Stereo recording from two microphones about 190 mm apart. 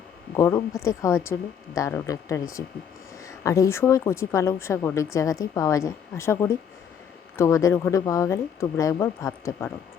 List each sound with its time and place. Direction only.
0.3 s speech: 15° left (ahead or behind)